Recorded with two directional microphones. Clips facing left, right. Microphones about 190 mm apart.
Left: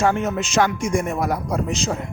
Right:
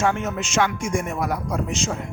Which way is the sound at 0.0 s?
35° left (ahead or behind).